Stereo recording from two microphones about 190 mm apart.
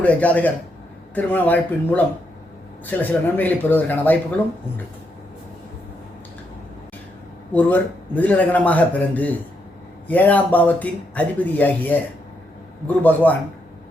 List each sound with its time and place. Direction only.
0.0 s speech: 5° left (ahead or behind)
7.5 s speech: 10° left (ahead or behind)
13.0 s speech: 10° left (ahead or behind)